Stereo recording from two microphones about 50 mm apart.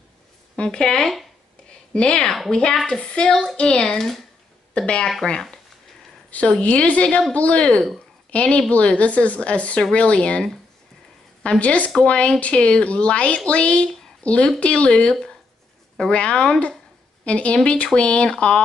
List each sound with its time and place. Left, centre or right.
0.6 s speech: centre
1.7 s a sound: left
2.5 s a woman's voice: centre
6.6 s a woman's voice: left
11.6 s a woman's voice: left